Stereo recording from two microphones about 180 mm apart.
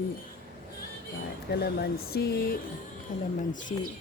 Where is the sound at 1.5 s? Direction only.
60° left (ahead or behind).